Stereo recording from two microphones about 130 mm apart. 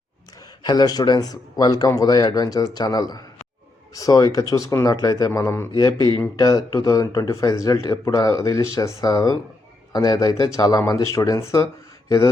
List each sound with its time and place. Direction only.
0.6 s speech: 35° left (ahead or behind)